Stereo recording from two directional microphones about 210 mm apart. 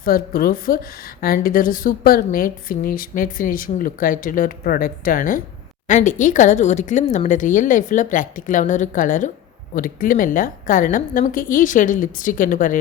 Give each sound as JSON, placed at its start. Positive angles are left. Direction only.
{"t": 0.0, "sound": "a woman's voice", "side_deg": 45}